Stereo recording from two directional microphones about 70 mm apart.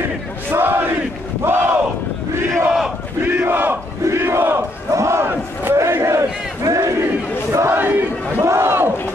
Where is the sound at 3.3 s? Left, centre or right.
Right.